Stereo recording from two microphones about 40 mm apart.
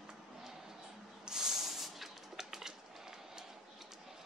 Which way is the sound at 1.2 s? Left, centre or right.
Centre.